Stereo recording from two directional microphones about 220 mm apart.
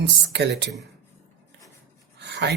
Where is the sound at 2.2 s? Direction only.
50° right (ahead or behind).